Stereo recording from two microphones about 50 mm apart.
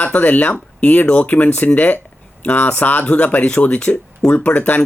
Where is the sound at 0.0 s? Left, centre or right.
Left.